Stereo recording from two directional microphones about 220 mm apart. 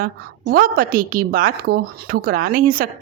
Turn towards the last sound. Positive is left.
turn(degrees=-40)  # may be behind; listen again after turning